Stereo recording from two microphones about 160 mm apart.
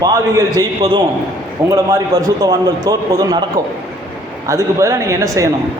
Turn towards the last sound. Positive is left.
turn(degrees=-20)  # may be behind; listen again after turning